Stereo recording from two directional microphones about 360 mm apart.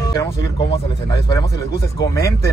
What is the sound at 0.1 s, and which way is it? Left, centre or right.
Speech, centre.